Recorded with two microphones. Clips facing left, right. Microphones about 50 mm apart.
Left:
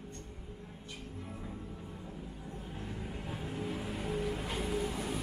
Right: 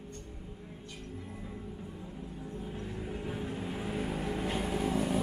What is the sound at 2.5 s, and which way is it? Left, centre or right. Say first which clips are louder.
Vehicle: right 3 dB; centre.